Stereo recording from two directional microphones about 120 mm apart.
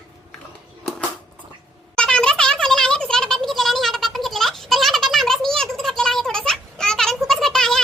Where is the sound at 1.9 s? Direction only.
5° left (ahead or behind).